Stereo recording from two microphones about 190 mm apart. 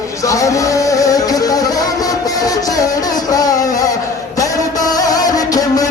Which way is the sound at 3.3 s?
20° left (ahead or behind).